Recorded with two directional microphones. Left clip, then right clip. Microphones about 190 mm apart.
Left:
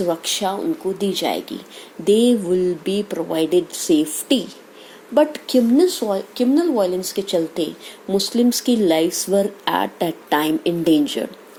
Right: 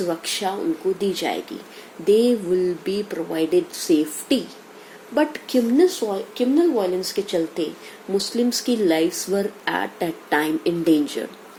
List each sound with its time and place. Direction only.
0.1 s speech: 40° left (ahead or behind)